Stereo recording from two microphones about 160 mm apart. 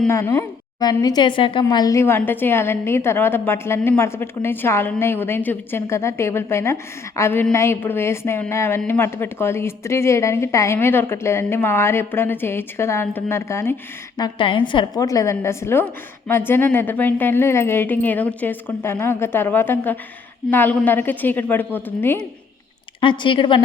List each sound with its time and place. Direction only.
0.1 s a woman's voice: 20° left (ahead or behind)
14.2 s a woman's voice: 30° left (ahead or behind); by 22.3 s 10° left (ahead or behind)
23.0 s speech: 30° left (ahead or behind)